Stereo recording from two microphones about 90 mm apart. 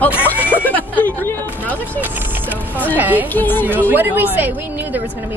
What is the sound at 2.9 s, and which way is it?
Speech, 20° right (ahead or behind).